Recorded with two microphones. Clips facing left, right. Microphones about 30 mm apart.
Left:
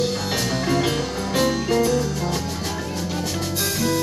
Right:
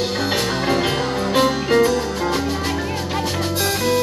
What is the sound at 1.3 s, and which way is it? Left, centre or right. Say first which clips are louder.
Music: right 3 dB; right.